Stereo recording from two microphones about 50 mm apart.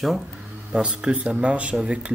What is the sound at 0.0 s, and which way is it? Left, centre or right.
Speech, centre.